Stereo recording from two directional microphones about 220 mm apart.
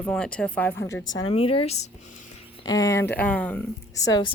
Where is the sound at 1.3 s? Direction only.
25° left (ahead or behind).